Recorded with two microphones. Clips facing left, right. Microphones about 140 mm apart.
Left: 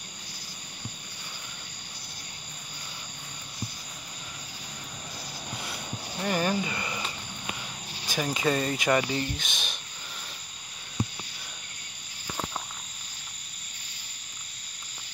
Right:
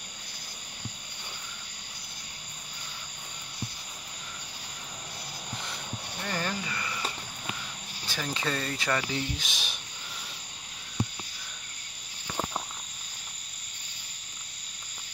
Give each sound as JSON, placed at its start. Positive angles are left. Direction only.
{"t": 6.2, "sound": "a sound", "side_deg": 20}
{"t": 8.1, "sound": "speech", "side_deg": 15}
{"t": 9.1, "sound": "speech", "side_deg": 0}